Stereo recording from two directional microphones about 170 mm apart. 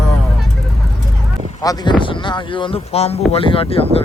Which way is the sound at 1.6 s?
25° left (ahead or behind).